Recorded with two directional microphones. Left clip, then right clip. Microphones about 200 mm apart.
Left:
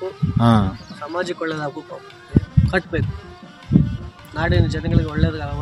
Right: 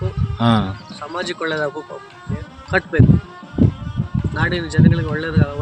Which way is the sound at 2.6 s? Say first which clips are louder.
Right 5 dB; 65° left (ahead or behind).